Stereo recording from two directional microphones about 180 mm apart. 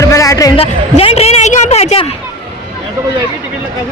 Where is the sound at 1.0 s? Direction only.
35° left (ahead or behind).